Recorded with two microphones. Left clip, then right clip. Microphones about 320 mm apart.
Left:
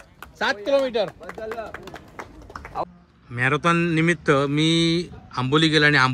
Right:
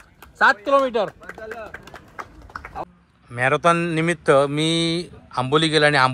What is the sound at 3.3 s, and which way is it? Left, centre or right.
Speech, centre.